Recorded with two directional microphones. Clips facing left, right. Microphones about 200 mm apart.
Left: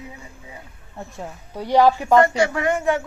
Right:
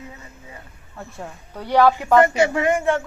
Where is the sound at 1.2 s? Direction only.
15° left (ahead or behind).